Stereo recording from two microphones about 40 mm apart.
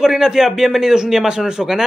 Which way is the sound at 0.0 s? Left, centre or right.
Centre.